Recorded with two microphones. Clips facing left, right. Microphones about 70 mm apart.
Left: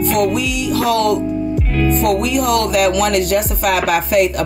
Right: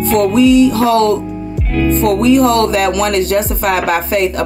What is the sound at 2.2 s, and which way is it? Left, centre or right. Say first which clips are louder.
Speech: right 6 dB; right.